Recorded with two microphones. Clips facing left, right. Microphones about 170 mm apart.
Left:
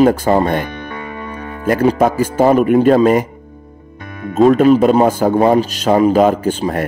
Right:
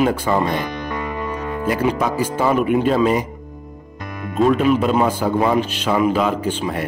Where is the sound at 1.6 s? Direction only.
45° left (ahead or behind).